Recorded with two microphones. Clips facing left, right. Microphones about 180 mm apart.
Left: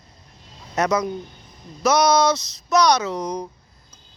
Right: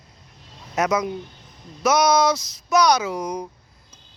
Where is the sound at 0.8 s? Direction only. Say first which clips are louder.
Left 1 dB; centre (ahead or behind).